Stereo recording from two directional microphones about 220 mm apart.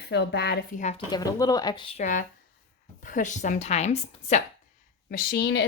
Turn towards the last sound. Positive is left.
turn(degrees=55)  # may be behind; listen again after turning